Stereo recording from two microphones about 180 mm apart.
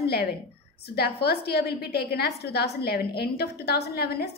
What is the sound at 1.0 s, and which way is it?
A woman's voice, 65° left (ahead or behind).